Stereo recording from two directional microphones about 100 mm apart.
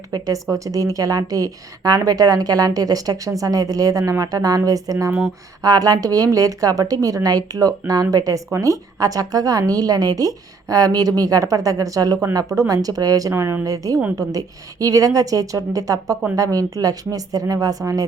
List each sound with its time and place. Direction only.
0.1 s a woman's voice: 35° right (ahead or behind)